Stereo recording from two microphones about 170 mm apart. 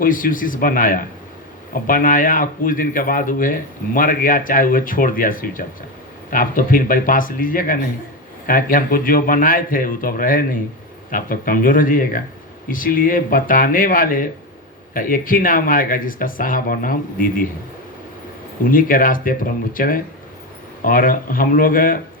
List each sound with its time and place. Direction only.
0.0 s speech: 55° left (ahead or behind)
18.6 s speech: 55° left (ahead or behind)